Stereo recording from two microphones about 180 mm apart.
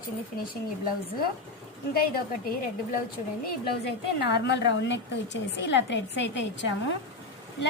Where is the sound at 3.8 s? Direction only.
70° left (ahead or behind).